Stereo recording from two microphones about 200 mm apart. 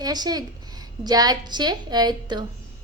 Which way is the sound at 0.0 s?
20° right (ahead or behind).